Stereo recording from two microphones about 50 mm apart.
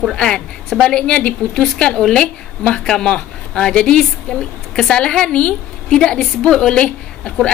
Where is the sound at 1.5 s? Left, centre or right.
Centre.